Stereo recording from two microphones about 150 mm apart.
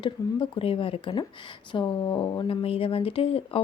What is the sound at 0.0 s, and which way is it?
Speech, 35° left (ahead or behind).